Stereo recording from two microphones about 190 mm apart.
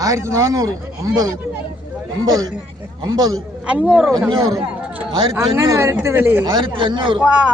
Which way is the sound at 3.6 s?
5° right (ahead or behind).